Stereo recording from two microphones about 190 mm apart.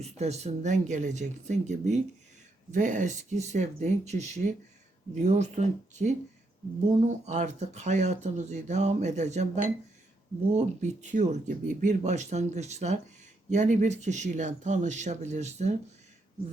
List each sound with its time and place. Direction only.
0.0 s speech: 35° right (ahead or behind)
10.5 s speech: 40° right (ahead or behind)